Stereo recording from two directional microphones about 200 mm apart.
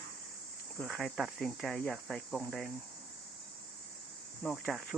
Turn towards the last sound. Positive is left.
turn(degrees=0)  # may be behind; listen again after turning